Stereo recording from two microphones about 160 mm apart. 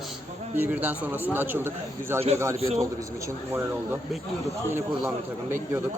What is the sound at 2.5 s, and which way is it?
Speech, 40° right (ahead or behind).